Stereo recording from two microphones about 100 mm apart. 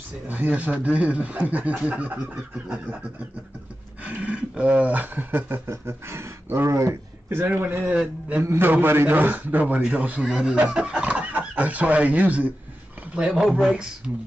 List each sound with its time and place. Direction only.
0.3 s a man's voice: 15° right (ahead or behind)
7.9 s a man's voice: 10° right (ahead or behind)
8.4 s a man's voice: 20° right (ahead or behind); by 14.1 s 5° right (ahead or behind)